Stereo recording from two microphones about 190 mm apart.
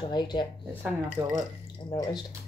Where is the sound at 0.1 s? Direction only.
25° left (ahead or behind).